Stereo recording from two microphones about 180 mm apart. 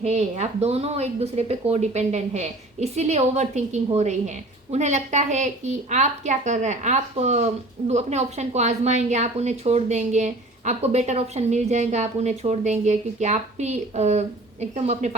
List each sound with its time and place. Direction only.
0.0 s a woman's voice: 40° right (ahead or behind)